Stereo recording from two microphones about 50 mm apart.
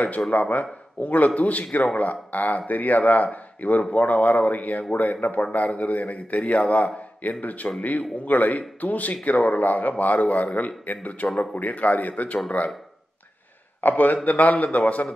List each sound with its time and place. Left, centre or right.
0.3 s speech: left
13.7 s speech: left